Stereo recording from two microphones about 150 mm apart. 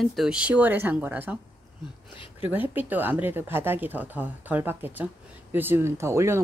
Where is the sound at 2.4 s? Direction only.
10° right (ahead or behind).